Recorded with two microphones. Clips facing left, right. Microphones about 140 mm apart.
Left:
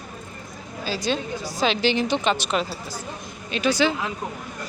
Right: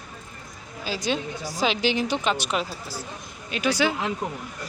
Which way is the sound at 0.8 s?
20° right (ahead or behind).